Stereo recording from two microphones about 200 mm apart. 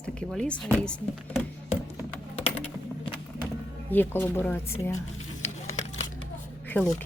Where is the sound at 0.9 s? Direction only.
5° left (ahead or behind).